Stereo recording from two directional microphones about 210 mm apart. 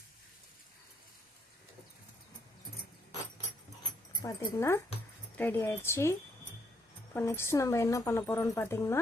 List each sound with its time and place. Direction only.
4.2 s speech: 15° left (ahead or behind)